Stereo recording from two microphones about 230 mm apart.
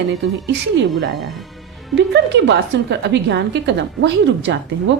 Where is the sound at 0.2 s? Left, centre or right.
Right.